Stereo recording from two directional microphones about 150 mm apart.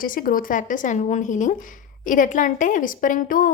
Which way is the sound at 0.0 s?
70° left (ahead or behind).